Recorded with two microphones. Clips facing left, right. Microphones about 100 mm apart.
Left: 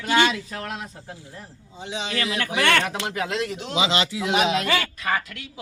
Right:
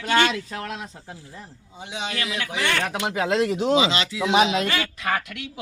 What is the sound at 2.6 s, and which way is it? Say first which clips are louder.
Speech: left 5 dB; 65° left (ahead or behind).